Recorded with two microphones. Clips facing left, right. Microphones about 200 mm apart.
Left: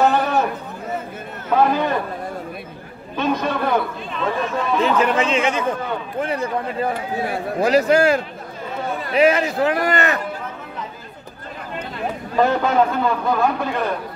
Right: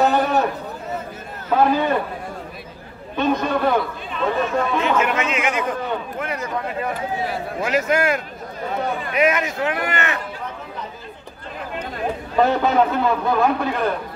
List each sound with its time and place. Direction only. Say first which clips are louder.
0.0 s a sound: even; centre (ahead or behind)
1.5 s a man's voice: even; centre (ahead or behind)
3.2 s a man's voice: right 1 dB; centre (ahead or behind)
4.9 s a man's voice: left 3 dB; 30° left (ahead or behind)
12.4 s a man's voice: even; centre (ahead or behind)